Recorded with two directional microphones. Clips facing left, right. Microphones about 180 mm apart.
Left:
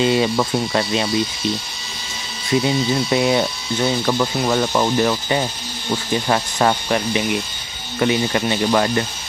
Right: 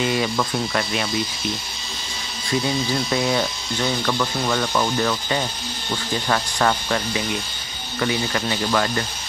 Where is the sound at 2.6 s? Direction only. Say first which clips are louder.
Left 4 dB; 20° left (ahead or behind).